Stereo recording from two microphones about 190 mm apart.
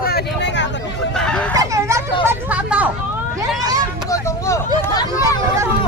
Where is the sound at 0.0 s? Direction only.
60° left (ahead or behind).